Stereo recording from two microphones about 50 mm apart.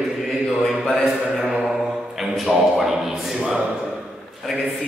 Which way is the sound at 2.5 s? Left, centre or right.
Centre.